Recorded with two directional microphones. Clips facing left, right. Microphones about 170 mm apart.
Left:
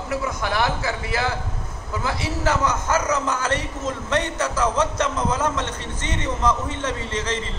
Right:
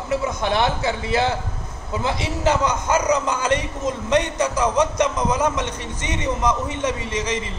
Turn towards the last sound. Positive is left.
turn(degrees=-15)  # may be behind; listen again after turning